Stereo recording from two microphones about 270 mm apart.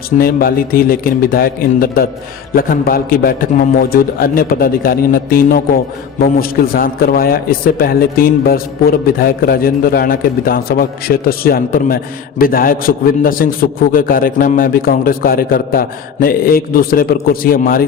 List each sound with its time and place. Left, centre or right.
0.2 s a man's voice: left